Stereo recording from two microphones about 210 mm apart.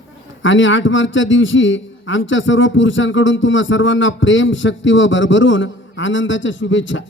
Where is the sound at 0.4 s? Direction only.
65° left (ahead or behind).